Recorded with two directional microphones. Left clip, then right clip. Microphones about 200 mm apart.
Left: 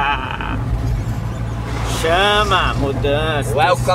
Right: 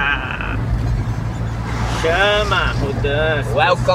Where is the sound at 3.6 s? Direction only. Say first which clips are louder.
Even; 55° left (ahead or behind).